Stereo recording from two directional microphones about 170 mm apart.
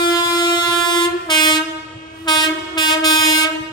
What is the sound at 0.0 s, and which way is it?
Train, 25° left (ahead or behind).